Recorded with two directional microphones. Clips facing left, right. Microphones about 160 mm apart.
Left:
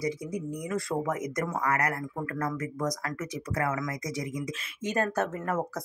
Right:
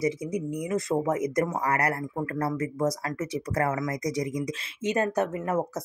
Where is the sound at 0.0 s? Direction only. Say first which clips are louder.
Right 4 dB; 20° right (ahead or behind); by 4.5 s 35° right (ahead or behind).